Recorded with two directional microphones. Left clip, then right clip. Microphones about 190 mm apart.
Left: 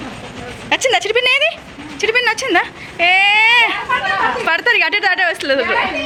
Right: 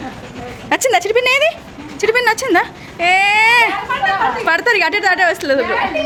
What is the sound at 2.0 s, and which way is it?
A woman's voice, 20° right (ahead or behind).